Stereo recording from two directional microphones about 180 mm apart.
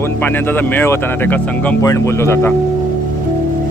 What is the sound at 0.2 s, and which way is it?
Speech, 10° left (ahead or behind).